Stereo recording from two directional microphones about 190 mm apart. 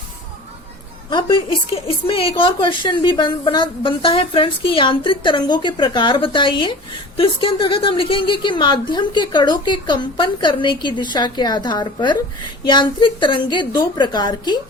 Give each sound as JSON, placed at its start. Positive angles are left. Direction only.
{"t": 1.1, "sound": "a woman's voice", "side_deg": 25}